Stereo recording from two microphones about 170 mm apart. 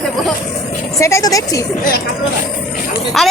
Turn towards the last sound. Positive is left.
turn(degrees=0)  # may be behind; listen again after turning